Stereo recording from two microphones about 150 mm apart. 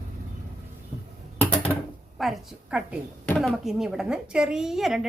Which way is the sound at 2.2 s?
5° right (ahead or behind).